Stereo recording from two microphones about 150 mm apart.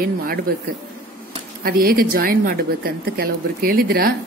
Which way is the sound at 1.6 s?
75° right (ahead or behind).